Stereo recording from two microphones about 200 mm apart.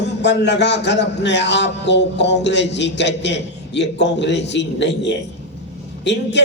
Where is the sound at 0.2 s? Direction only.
60° left (ahead or behind).